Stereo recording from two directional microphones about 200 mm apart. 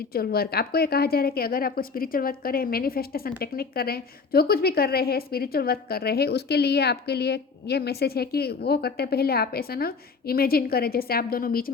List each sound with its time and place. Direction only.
0.1 s a woman's voice: 50° left (ahead or behind)